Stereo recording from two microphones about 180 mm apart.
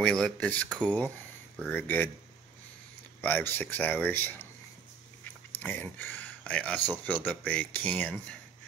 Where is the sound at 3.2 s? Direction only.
10° left (ahead or behind).